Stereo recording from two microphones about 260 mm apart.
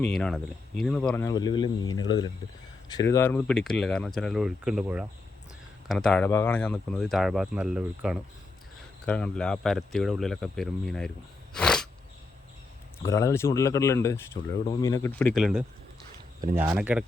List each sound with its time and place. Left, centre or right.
0.0 s speech: centre
11.5 s a sound: centre
13.0 s speech: centre